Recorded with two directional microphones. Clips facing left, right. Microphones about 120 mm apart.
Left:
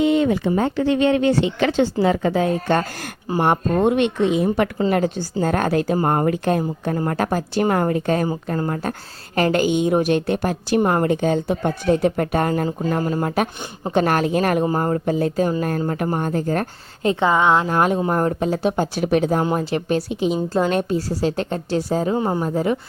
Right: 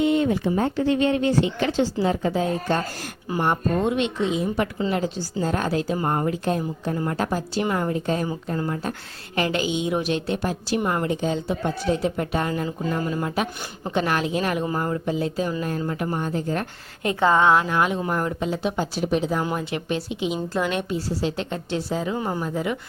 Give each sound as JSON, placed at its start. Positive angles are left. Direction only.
{"t": 0.0, "sound": "speech", "side_deg": 90}
{"t": 3.4, "sound": "speech", "side_deg": 60}
{"t": 8.4, "sound": "a woman's voice", "side_deg": 50}
{"t": 13.0, "sound": "a woman's voice", "side_deg": 35}
{"t": 13.2, "sound": "a woman's voice", "side_deg": 50}
{"t": 17.2, "sound": "speech", "side_deg": 15}
{"t": 17.7, "sound": "a woman's voice", "side_deg": 40}
{"t": 19.0, "sound": "speech", "side_deg": 65}
{"t": 19.3, "sound": "a woman's voice", "side_deg": 40}